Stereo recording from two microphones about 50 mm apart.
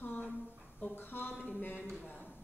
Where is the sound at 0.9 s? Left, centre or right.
Left.